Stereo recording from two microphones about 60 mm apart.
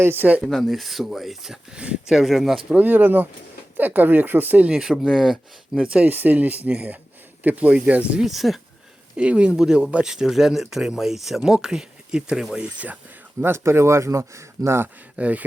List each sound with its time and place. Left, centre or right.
0.0 s speech: right
0.4 s speech: centre
1.8 s speech: centre
2.1 s speech: centre
2.6 s speech: right
4.7 s speech: centre
5.1 s speech: centre
5.7 s speech: centre
6.1 s speech: right
8.2 s speech: centre
9.1 s speech: centre
13.4 s speech: right
15.1 s speech: right